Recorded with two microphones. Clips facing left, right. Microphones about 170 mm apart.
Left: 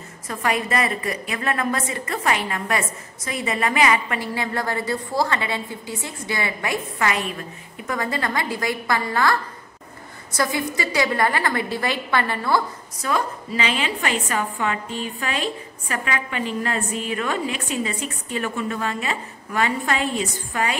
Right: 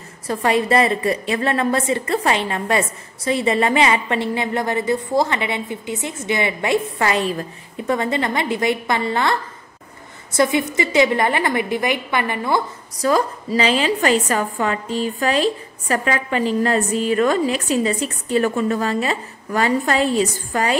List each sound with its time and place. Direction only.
0.3 s a woman's voice: 30° right (ahead or behind)
13.0 s a woman's voice: 35° right (ahead or behind)